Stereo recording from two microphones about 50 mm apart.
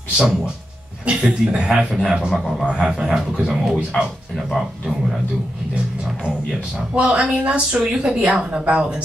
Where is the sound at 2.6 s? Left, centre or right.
Centre.